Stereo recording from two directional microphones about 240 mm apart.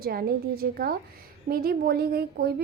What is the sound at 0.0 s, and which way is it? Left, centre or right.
A woman's voice, right.